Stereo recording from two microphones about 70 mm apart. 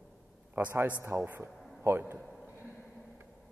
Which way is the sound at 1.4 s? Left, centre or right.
Right.